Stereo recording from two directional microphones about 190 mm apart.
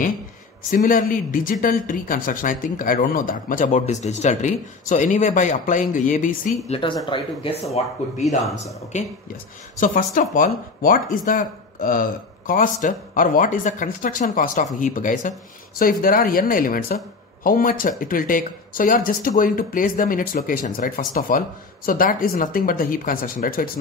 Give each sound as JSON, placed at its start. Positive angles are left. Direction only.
{"t": 0.7, "sound": "speech", "side_deg": 45}
{"t": 6.8, "sound": "speech", "side_deg": 25}
{"t": 7.7, "sound": "speech", "side_deg": 35}